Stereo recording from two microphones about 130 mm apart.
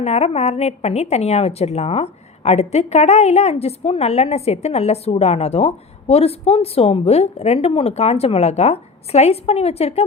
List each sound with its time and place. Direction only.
0.0 s a woman's voice: 55° left (ahead or behind)